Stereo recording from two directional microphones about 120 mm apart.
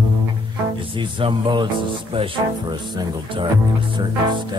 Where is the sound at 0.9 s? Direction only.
45° right (ahead or behind).